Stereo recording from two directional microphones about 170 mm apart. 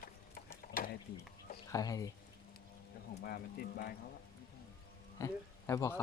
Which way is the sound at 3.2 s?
60° left (ahead or behind).